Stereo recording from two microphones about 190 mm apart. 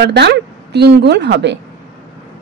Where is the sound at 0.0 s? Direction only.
60° right (ahead or behind).